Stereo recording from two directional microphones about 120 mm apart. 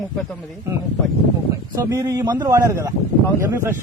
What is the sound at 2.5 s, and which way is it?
Speech, 25° right (ahead or behind).